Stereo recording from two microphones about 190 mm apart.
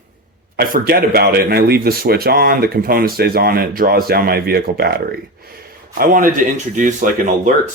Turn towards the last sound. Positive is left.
turn(degrees=-40)  # may be behind; listen again after turning